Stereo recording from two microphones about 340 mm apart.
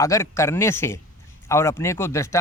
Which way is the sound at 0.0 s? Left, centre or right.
Centre.